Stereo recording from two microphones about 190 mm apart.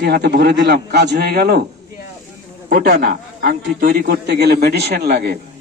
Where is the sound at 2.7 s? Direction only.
50° right (ahead or behind).